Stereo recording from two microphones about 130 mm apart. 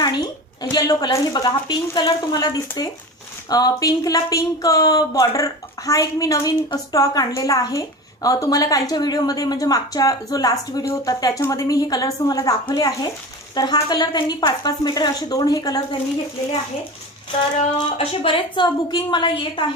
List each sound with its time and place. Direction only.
0.0 s a woman's voice: 30° left (ahead or behind)
17.9 s a woman's voice: 50° left (ahead or behind)